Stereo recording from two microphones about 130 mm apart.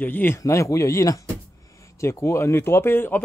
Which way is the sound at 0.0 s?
15° left (ahead or behind).